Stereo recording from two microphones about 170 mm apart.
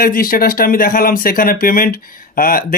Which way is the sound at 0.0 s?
60° left (ahead or behind).